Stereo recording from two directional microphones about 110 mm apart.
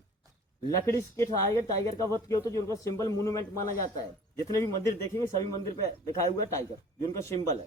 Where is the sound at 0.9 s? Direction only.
25° left (ahead or behind).